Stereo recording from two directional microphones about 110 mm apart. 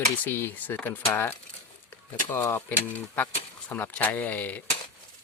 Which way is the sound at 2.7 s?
15° left (ahead or behind).